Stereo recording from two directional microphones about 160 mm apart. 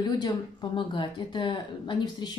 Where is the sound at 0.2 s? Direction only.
30° left (ahead or behind).